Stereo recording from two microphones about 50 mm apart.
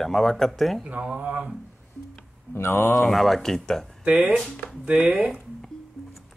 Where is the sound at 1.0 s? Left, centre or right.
Right.